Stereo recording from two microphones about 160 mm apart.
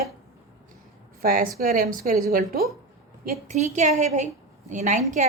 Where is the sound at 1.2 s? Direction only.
60° right (ahead or behind).